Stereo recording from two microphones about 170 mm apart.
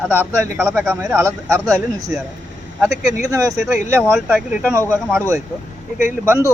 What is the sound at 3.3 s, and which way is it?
Speech, 20° right (ahead or behind).